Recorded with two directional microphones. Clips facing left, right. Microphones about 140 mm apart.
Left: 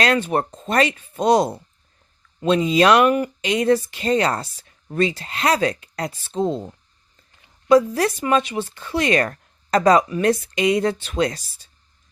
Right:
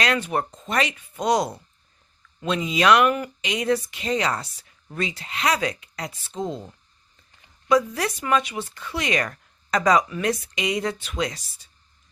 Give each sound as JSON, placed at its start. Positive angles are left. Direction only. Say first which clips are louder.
{"t": 0.0, "sound": "speech", "louder": "left 4 dB", "side_deg": 30}